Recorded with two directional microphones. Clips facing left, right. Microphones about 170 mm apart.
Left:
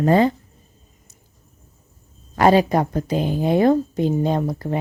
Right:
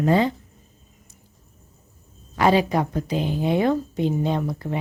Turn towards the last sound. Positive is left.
turn(degrees=40)  # may be behind; listen again after turning